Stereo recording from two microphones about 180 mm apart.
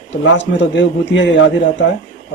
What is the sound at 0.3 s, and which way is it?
Speech, 85° left.